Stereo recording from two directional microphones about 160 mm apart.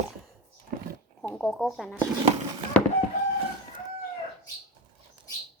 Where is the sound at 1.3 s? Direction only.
Centre (ahead or behind).